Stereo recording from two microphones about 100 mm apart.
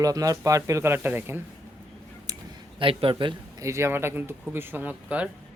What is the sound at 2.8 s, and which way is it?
Speech, 65° right (ahead or behind).